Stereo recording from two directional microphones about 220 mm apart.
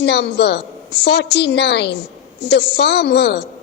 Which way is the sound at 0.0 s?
50° left (ahead or behind).